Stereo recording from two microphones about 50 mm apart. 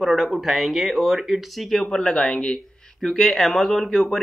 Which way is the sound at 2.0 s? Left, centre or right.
Left.